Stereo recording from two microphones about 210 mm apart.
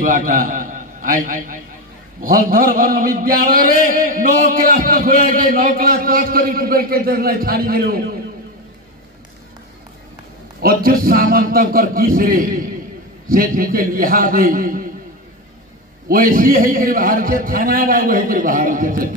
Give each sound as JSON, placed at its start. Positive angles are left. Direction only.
{"t": 0.0, "sound": "a man's voice", "side_deg": -40}
{"t": 10.6, "sound": "a man's voice", "side_deg": -45}
{"t": 16.1, "sound": "a man's voice", "side_deg": -40}